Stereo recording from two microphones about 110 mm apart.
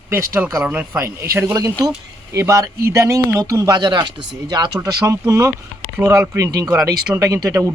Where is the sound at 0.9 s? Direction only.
25° right (ahead or behind).